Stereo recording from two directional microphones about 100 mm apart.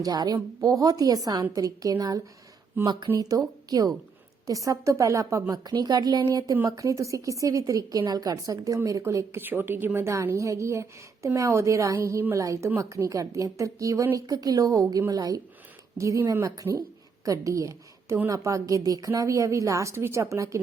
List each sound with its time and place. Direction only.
0.0 s a woman's voice: 40° right (ahead or behind)